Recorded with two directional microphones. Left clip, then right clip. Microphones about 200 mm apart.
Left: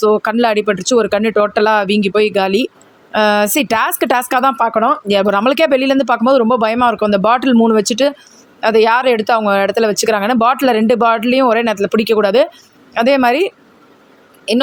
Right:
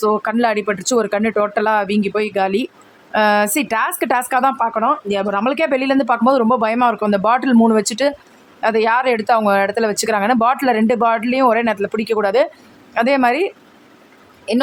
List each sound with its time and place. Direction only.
0.0 s a woman's voice: 15° left (ahead or behind)